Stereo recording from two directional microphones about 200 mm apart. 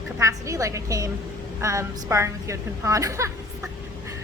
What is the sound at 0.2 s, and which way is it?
A woman's voice, 15° right (ahead or behind).